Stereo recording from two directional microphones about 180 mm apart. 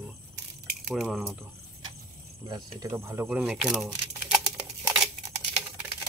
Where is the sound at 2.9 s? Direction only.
15° right (ahead or behind).